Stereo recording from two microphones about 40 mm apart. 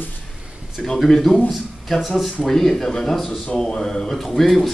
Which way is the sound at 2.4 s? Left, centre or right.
Centre.